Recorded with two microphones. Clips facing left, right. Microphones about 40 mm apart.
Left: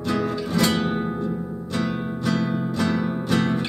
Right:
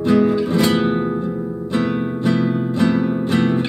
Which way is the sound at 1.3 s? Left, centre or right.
Centre.